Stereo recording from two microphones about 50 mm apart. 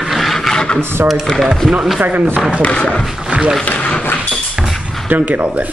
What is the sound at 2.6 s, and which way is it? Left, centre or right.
Speech, left.